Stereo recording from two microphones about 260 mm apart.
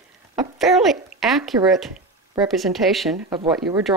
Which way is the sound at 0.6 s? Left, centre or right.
Centre.